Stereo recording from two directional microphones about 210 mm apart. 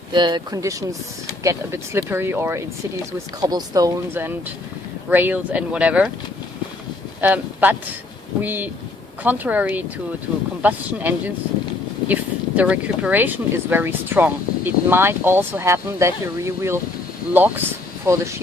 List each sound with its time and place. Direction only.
0.1 s speech: 20° right (ahead or behind); by 6.1 s 5° right (ahead or behind)
7.2 s speech: 10° right (ahead or behind)